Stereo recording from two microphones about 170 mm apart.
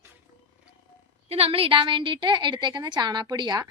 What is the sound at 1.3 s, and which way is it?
A woman's voice, 35° right (ahead or behind).